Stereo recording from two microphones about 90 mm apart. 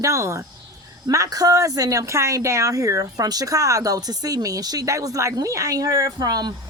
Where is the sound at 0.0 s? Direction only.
35° right (ahead or behind).